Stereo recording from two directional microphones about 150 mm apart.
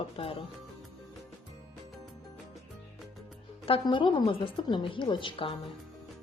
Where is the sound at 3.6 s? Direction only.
35° left (ahead or behind).